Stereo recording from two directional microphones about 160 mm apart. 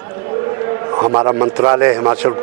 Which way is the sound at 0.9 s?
25° right (ahead or behind).